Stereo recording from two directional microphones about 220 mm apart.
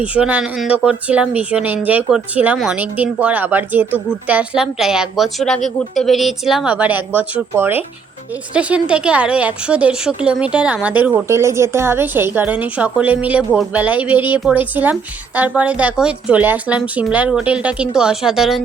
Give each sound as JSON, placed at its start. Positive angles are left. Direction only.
{"t": 0.0, "sound": "a woman's voice", "side_deg": -5}